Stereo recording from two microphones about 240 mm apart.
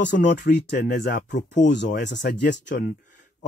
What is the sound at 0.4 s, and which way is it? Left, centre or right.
Speech, left.